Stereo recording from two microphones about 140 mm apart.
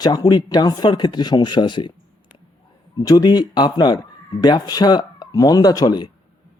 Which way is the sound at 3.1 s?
30° left (ahead or behind).